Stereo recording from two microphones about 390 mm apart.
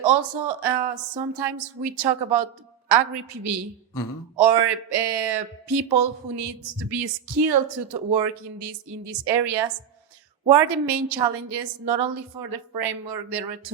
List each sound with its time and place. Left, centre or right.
0.0 s speech: right
4.4 s speech: right